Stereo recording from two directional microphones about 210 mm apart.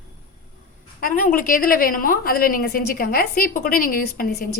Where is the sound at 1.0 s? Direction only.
40° left (ahead or behind).